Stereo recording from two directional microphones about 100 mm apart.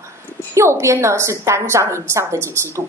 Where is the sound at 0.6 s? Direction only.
30° right (ahead or behind).